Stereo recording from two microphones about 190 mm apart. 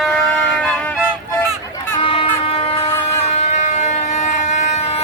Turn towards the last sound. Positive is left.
turn(degrees=35)  # may be behind; listen again after turning